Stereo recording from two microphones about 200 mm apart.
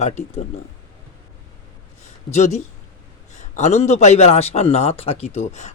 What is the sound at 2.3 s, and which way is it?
Speech, 35° left (ahead or behind).